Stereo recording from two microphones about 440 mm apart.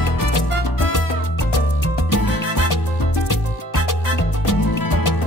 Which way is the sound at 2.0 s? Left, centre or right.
Left.